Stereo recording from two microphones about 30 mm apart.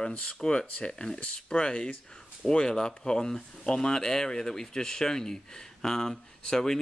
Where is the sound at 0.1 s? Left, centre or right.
Left.